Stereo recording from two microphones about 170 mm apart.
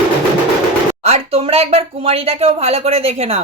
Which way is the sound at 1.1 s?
35° right (ahead or behind).